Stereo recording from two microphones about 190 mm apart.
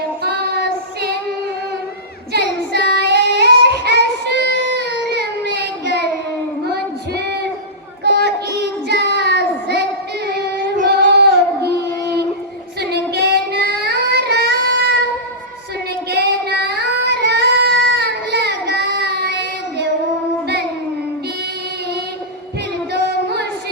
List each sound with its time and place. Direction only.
0.2 s child singing: 55° right (ahead or behind)
2.3 s child singing: 60° right (ahead or behind)
8.0 s child singing: 55° right (ahead or behind)
12.8 s child singing: 60° right (ahead or behind)
16.0 s child singing: 60° right (ahead or behind)
22.9 s singing: 60° right (ahead or behind)